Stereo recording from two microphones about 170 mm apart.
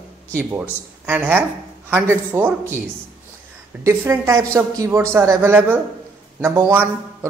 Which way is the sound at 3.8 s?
15° right (ahead or behind).